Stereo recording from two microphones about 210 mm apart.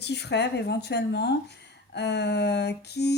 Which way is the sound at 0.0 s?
55° left (ahead or behind).